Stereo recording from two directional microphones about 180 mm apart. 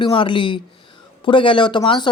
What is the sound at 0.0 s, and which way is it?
Speech, 25° left (ahead or behind).